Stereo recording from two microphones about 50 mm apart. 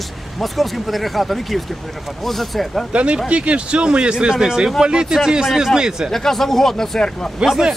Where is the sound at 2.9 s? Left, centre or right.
Right.